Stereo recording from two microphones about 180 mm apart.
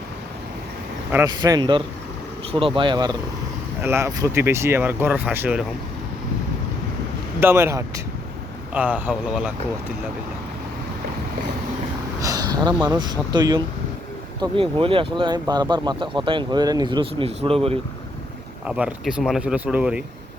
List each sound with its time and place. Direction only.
1.1 s speech: 20° right (ahead or behind)
3.8 s speech: 15° right (ahead or behind)
7.3 s speech: 15° right (ahead or behind)
12.2 s speech: 20° right (ahead or behind)
18.6 s speech: 5° right (ahead or behind)